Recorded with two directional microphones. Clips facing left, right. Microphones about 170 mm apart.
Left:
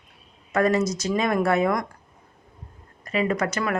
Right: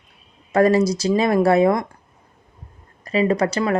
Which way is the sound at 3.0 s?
35° right (ahead or behind).